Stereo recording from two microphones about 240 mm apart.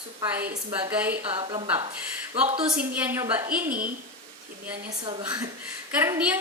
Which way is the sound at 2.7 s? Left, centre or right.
Centre.